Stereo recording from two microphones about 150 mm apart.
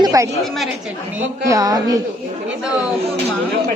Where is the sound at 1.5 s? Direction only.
25° right (ahead or behind).